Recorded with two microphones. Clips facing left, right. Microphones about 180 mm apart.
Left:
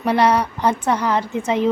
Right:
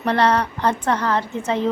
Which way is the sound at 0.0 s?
10° left (ahead or behind).